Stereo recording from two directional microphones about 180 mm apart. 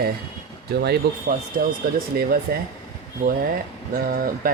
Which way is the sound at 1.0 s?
60° right (ahead or behind).